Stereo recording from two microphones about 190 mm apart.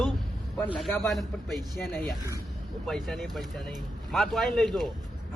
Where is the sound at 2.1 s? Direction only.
15° right (ahead or behind).